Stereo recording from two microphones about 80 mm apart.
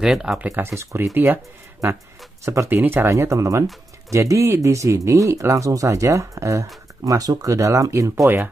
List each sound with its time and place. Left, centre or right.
0.0 s speech: centre
0.5 s speech: right
2.7 s speech: right
3.1 s speech: right